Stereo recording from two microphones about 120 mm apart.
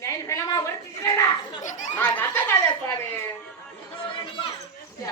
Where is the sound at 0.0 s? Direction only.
25° left (ahead or behind).